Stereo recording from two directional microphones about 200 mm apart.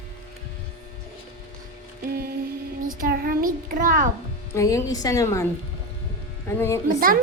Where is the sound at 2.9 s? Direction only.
45° right (ahead or behind).